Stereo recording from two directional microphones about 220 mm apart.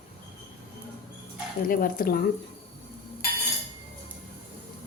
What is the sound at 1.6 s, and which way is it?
Speech, 40° left (ahead or behind).